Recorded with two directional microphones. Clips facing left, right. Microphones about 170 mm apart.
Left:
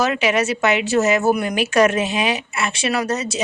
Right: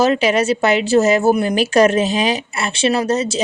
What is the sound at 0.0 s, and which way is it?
A woman's voice, 30° right (ahead or behind).